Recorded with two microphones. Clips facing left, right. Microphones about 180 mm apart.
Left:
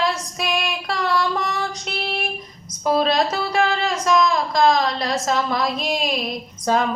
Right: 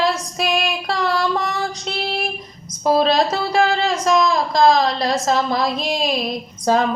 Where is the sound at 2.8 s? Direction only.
35° right (ahead or behind).